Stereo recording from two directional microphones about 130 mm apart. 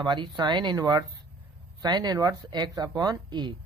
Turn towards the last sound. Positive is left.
turn(degrees=-35)  # may be behind; listen again after turning